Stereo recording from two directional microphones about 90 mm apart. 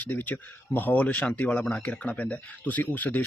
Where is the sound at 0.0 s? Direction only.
20° left (ahead or behind).